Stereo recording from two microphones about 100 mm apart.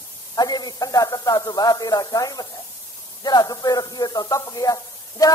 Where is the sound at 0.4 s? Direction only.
40° left (ahead or behind).